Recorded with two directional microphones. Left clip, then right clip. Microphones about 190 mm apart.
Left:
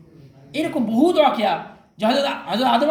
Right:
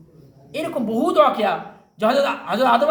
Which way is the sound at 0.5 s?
20° right (ahead or behind).